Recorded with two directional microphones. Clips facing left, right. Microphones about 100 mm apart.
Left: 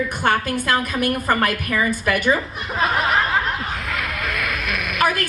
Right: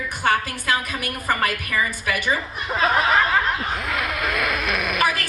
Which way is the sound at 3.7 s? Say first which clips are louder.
Right 1 dB; 25° right (ahead or behind).